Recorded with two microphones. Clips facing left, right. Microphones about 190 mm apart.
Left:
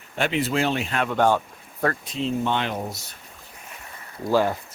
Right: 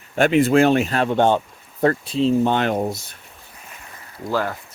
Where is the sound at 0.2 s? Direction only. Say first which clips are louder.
Right 9 dB; 50° right (ahead or behind).